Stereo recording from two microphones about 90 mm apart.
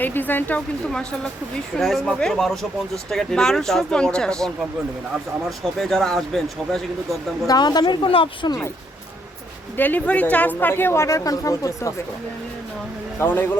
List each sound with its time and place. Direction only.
0.0 s a woman's voice: 20° left (ahead or behind)
0.9 s speech: 5° left (ahead or behind)
7.4 s speech: 50° left (ahead or behind)
8.0 s speech: 75° left (ahead or behind)
9.7 s a woman's voice: 20° left (ahead or behind); by 11.9 s 35° left (ahead or behind)
13.1 s a woman's voice: 25° left (ahead or behind)